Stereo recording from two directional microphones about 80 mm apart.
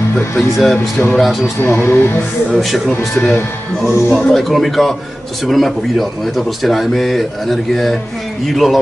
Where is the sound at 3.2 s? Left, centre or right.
Left.